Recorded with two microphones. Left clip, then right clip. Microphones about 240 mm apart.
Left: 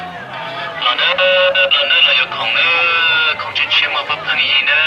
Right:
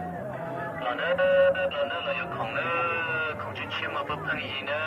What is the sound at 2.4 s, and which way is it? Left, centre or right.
Sheep, centre.